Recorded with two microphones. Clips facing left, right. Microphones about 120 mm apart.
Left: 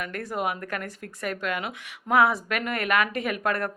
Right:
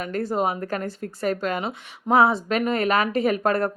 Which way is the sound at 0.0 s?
30° right (ahead or behind).